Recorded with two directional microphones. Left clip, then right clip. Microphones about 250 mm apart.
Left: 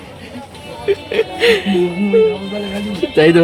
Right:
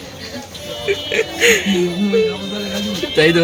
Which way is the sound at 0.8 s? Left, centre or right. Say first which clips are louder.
Left 2 dB; centre.